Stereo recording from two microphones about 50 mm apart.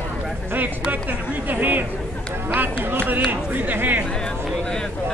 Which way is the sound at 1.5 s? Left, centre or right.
Right.